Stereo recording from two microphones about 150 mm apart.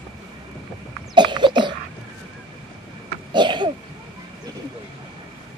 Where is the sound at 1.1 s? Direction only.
30° right (ahead or behind).